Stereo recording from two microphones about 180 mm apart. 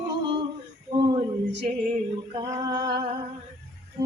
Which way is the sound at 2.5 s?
25° right (ahead or behind).